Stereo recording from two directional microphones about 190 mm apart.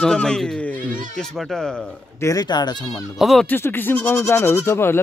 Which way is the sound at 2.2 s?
20° left (ahead or behind).